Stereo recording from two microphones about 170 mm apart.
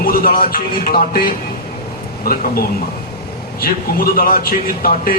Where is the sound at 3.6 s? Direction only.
60° left (ahead or behind).